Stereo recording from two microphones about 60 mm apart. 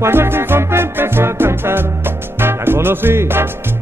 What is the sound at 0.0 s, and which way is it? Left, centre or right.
Music, right.